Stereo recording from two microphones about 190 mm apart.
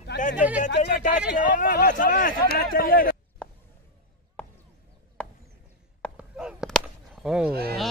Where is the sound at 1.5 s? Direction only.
45° left (ahead or behind).